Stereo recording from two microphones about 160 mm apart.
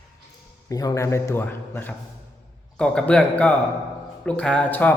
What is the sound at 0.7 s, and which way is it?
Speech, 20° left (ahead or behind).